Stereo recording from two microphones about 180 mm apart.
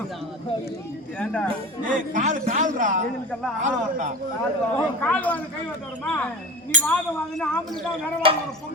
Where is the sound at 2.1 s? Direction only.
45° right (ahead or behind).